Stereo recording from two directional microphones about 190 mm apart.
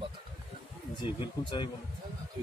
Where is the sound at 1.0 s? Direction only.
25° left (ahead or behind).